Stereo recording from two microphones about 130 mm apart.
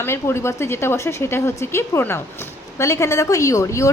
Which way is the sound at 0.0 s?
20° left (ahead or behind).